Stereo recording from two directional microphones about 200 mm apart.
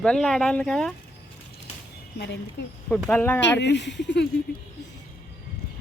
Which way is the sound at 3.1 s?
10° left (ahead or behind).